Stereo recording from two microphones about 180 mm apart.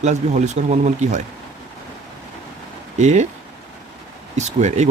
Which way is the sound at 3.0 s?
40° right (ahead or behind).